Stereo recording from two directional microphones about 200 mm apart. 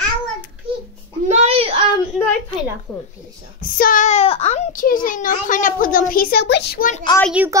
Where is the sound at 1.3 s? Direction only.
35° right (ahead or behind).